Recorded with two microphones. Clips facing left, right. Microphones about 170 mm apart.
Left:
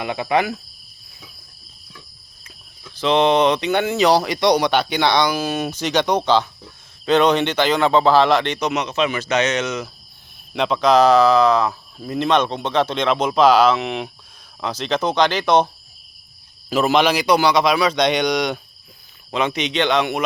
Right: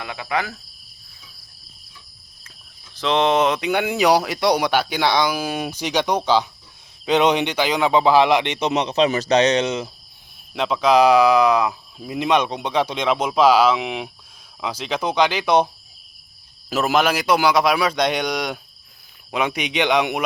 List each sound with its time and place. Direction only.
0.0 s speech: 25° left (ahead or behind)
2.9 s speech: centre (ahead or behind); by 9.9 s 30° right (ahead or behind)
10.5 s a man's voice: 5° right (ahead or behind)